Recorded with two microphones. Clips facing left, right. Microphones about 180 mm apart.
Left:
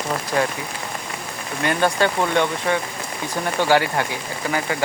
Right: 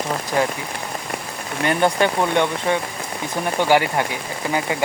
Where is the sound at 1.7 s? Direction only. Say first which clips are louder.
Right 1 dB; 20° right (ahead or behind).